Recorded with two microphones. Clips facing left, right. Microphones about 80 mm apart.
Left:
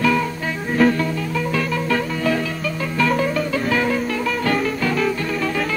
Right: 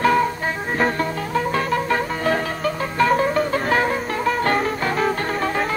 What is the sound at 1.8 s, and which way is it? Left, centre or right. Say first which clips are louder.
Music: even; right.